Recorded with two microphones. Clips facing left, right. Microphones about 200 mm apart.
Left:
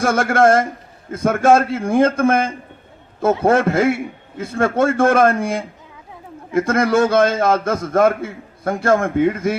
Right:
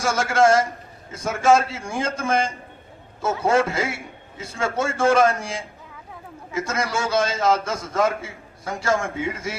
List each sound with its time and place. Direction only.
0.0 s a man's voice: 55° left (ahead or behind)